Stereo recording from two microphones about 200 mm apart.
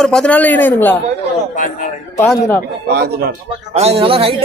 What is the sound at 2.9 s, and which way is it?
Speech, 55° right (ahead or behind).